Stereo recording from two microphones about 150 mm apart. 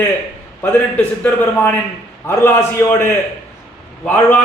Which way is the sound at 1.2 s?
15° left (ahead or behind).